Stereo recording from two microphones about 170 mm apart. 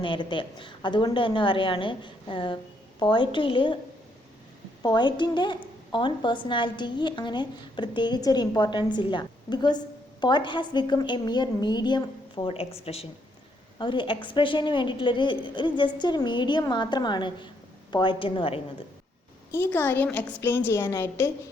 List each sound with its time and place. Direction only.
0.0 s a woman's voice: 30° left (ahead or behind)
4.8 s a woman's voice: 25° left (ahead or behind)
19.5 s a woman's voice: 10° left (ahead or behind)